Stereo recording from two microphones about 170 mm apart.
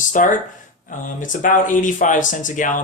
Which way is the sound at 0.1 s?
50° left (ahead or behind).